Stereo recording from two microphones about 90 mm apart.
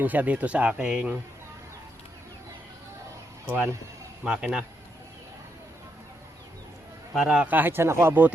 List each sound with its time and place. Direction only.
0.0 s speech: 15° right (ahead or behind)
3.4 s speech: 15° right (ahead or behind)
7.1 s speech: 5° right (ahead or behind)
7.4 s speech: 20° right (ahead or behind)